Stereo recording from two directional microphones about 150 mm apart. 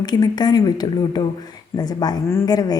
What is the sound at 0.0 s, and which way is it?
A woman's voice, 30° left (ahead or behind).